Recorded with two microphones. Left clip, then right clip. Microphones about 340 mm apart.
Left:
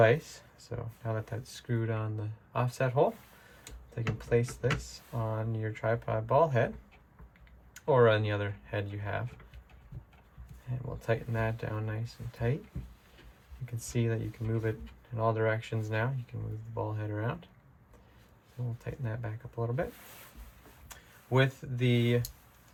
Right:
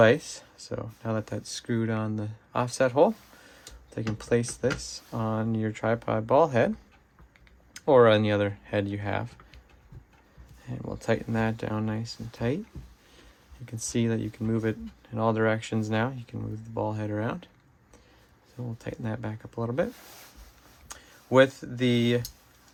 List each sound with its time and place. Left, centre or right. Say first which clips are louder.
0.0 s speech: right 5 dB; right
7.7 s speech: right 6 dB; centre
10.8 s speech: right 5 dB; right
13.7 s speech: right 5 dB; right
18.8 s speech: right 6 dB; right
21.3 s speech: right 9 dB; right